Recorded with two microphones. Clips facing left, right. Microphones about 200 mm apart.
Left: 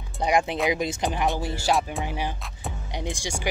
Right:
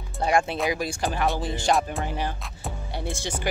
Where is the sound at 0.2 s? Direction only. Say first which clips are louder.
Even; 15° left (ahead or behind); by 2.0 s centre (ahead or behind).